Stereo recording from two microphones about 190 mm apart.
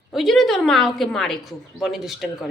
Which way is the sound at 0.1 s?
Centre (ahead or behind).